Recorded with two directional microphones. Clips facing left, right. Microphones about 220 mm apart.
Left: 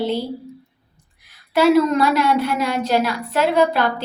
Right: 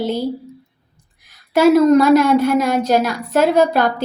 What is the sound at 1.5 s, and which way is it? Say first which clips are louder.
A woman's voice: right 4 dB; 45° right (ahead or behind).